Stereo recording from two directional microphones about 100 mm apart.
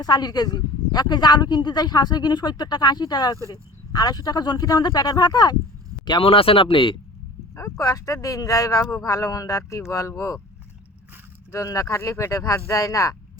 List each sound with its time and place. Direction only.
0.0 s speech: 40° left (ahead or behind)
6.1 s speech: 65° left (ahead or behind)
7.5 s speech: 30° left (ahead or behind)
11.5 s speech: 30° left (ahead or behind)